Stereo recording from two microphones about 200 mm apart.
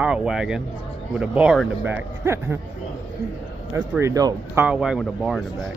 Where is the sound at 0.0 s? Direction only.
5° right (ahead or behind).